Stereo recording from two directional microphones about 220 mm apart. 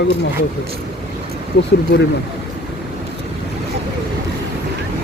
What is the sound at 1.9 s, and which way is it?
Speech, 40° left (ahead or behind).